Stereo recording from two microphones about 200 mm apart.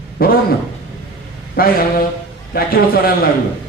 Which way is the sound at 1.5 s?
45° left (ahead or behind).